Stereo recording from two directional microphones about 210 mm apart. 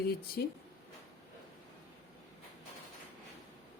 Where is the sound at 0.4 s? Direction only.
45° left (ahead or behind).